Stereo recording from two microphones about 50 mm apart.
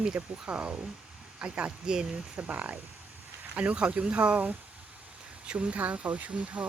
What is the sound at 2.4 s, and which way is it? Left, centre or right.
Speech, right.